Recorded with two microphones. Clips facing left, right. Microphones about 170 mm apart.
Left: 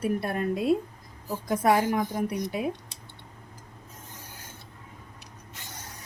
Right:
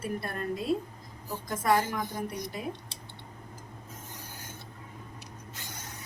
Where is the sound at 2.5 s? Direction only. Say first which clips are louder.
Left 8 dB; 60° left (ahead or behind).